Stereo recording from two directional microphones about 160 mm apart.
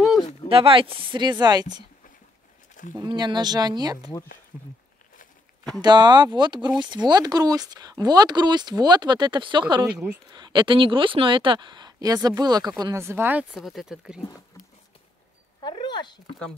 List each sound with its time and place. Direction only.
0.5 s speech: 35° right (ahead or behind)
3.0 s speech: 30° right (ahead or behind)
5.8 s speech: 25° right (ahead or behind)
9.8 s speech: 5° right (ahead or behind)
10.3 s speech: 25° right (ahead or behind); by 14.2 s 5° right (ahead or behind)
15.6 s a sound: 30° left (ahead or behind)